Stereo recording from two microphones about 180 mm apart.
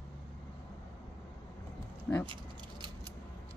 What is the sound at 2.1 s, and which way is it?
Speech, 10° left (ahead or behind).